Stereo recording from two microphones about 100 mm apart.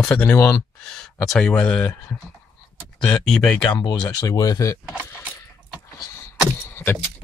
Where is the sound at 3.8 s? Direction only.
45° left (ahead or behind).